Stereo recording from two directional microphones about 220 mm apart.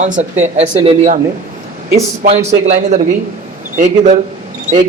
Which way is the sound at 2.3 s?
30° right (ahead or behind).